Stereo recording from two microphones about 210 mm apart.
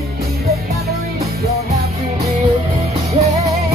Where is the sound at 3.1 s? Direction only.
30° right (ahead or behind).